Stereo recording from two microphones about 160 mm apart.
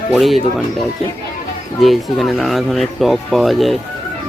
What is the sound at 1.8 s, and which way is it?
Speech, centre (ahead or behind).